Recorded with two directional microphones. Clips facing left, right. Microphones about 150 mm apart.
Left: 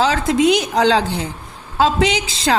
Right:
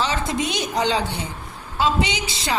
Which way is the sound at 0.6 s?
90° left.